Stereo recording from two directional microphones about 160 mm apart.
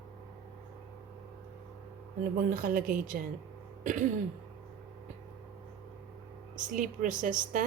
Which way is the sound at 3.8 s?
55° right (ahead or behind).